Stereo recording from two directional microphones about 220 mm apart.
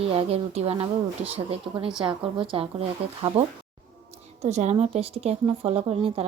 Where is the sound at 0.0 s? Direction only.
25° right (ahead or behind).